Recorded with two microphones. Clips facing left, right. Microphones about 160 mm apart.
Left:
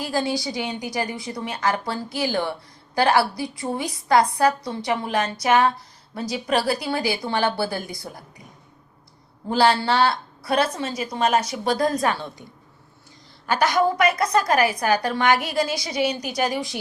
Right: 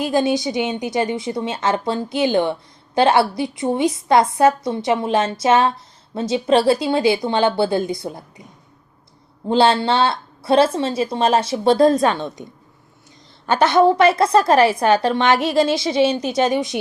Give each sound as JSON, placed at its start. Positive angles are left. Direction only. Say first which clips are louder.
{"t": 0.0, "sound": "a woman's voice", "louder": "right 6 dB", "side_deg": -20}
{"t": 9.5, "sound": "a woman's voice", "louder": "right 4 dB", "side_deg": -25}
{"t": 13.5, "sound": "a woman's voice", "louder": "right 6 dB", "side_deg": -25}